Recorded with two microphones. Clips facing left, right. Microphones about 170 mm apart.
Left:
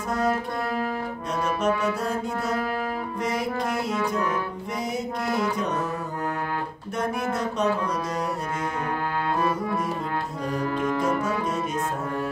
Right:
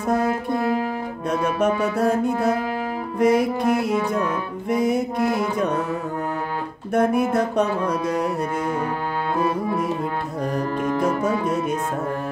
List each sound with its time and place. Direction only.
1.4 s music: 55° right (ahead or behind)
4.6 s music: 55° right (ahead or behind)
6.9 s music: 55° right (ahead or behind)